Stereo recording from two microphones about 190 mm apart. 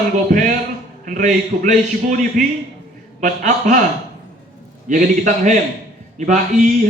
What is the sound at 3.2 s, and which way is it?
Speech, 40° right (ahead or behind).